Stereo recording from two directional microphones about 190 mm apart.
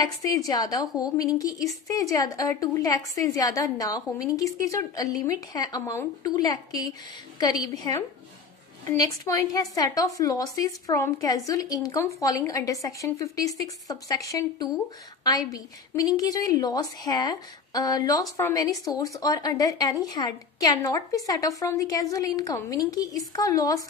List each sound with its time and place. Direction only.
0.0 s a woman's voice: 20° left (ahead or behind)
8.8 s a woman's voice: 20° left (ahead or behind)